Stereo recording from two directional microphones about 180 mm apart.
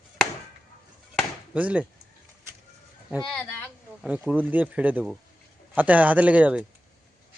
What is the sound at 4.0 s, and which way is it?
Speech, 10° right (ahead or behind).